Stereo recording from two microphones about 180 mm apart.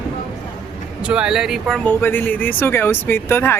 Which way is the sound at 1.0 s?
5° right (ahead or behind).